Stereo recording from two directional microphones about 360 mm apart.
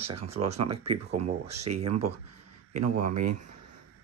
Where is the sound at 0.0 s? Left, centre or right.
Centre.